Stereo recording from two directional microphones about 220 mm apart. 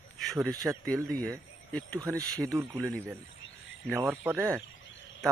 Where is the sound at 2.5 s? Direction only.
10° right (ahead or behind).